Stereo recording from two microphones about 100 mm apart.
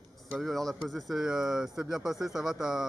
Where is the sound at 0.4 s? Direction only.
Centre (ahead or behind).